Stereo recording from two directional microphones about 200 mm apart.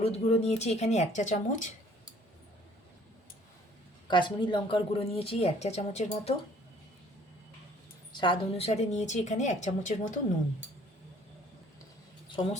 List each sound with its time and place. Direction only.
0.0 s a woman's voice: 35° left (ahead or behind)
4.1 s speech: 25° left (ahead or behind)
8.1 s a woman's voice: 25° left (ahead or behind)
12.4 s speech: 25° left (ahead or behind)